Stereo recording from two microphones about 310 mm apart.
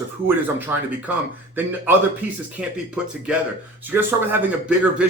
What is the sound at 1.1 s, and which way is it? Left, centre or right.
Speech, centre.